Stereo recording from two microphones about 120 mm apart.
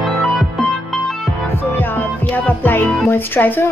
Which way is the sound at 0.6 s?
Centre (ahead or behind).